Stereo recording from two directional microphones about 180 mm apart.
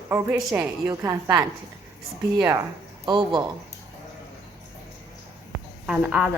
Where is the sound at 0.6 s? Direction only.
20° right (ahead or behind).